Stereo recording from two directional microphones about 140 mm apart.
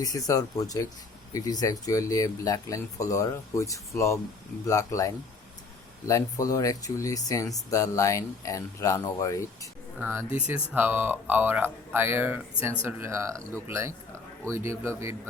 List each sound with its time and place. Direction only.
0.0 s speech: 25° left (ahead or behind)
10.0 s speech: 15° right (ahead or behind)